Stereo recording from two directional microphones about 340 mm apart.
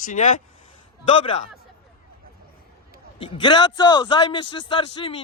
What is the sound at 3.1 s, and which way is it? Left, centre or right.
A man's voice, centre.